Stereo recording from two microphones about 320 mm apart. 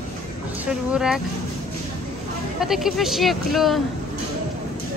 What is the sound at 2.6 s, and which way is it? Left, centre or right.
Speech, centre.